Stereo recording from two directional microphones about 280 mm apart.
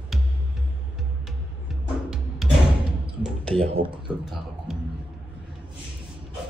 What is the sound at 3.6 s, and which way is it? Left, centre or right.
Speech, centre.